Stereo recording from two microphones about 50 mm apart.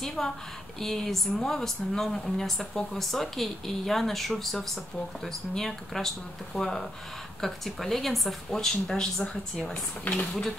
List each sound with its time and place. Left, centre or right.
0.0 s speech: centre
10.1 s speech: left